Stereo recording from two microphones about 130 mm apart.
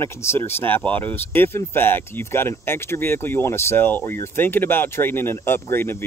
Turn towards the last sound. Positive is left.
turn(degrees=15)  # may be behind; listen again after turning